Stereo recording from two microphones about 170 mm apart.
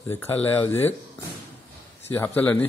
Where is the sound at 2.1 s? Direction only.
10° left (ahead or behind).